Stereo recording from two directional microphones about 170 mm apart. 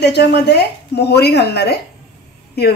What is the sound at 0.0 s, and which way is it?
Speech, 80° left.